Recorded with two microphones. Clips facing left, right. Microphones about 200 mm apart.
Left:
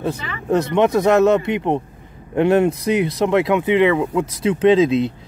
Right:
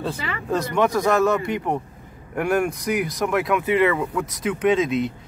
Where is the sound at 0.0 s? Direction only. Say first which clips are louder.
Left 3 dB; 20° left (ahead or behind).